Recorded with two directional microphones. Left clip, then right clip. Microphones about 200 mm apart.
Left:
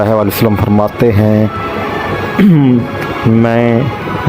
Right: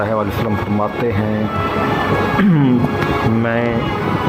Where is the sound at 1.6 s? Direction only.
Centre (ahead or behind).